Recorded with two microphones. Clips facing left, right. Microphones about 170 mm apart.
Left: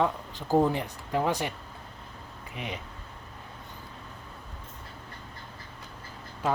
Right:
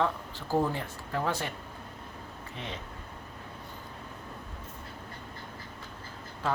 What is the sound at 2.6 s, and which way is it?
Speech, 15° left (ahead or behind).